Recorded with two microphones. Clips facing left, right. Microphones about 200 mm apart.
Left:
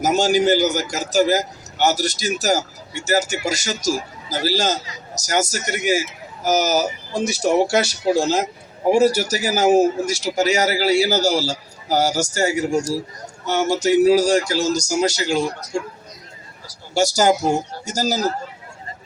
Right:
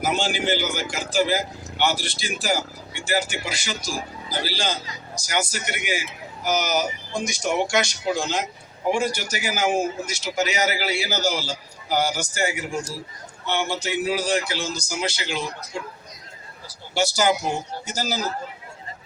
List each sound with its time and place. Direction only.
0.0 s a man's voice: 40° left (ahead or behind)
9.0 s a man's voice: 10° left (ahead or behind)
9.4 s a man's voice: 40° left (ahead or behind)
11.2 s a man's voice: 10° left (ahead or behind)
11.4 s a man's voice: 40° left (ahead or behind)
16.9 s a man's voice: 40° left (ahead or behind)